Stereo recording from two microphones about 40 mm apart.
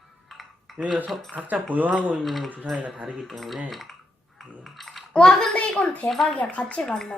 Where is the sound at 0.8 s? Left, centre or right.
Right.